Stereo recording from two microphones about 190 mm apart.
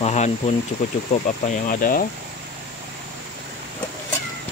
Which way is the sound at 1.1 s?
35° left (ahead or behind).